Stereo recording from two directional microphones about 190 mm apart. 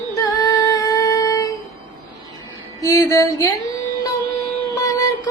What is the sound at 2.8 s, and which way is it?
Music, 15° left (ahead or behind).